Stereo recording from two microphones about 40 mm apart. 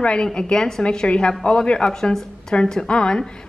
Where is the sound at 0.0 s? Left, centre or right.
Left.